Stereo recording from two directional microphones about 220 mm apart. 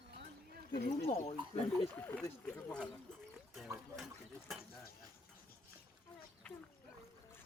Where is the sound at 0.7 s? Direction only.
40° left (ahead or behind).